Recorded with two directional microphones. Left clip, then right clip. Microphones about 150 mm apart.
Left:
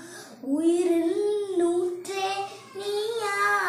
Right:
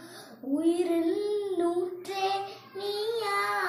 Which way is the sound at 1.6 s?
10° left (ahead or behind).